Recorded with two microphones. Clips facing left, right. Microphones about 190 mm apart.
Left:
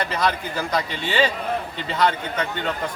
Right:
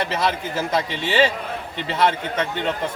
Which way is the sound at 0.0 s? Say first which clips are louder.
Right 1 dB; 25° right (ahead or behind).